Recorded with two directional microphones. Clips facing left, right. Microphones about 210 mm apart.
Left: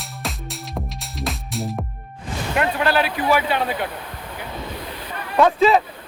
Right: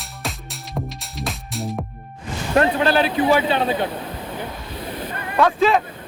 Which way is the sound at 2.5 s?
35° right (ahead or behind).